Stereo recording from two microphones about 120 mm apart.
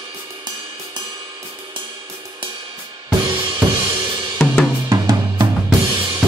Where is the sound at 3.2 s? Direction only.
40° right (ahead or behind).